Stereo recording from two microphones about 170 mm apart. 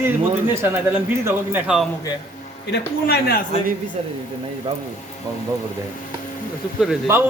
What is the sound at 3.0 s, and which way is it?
Speech, 65° left (ahead or behind).